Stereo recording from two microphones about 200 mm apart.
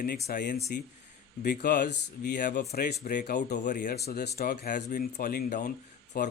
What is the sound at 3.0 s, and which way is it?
Speech, 40° left (ahead or behind).